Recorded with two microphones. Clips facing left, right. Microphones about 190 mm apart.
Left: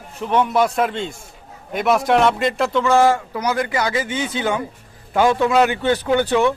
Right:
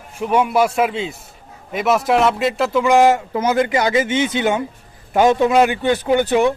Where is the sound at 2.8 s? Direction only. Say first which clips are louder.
Right 3 dB; 15° right (ahead or behind).